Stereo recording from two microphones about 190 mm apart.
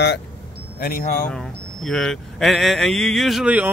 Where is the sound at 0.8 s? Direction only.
50° left (ahead or behind).